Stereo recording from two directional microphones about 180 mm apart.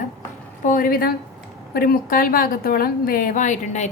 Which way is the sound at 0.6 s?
50° left (ahead or behind).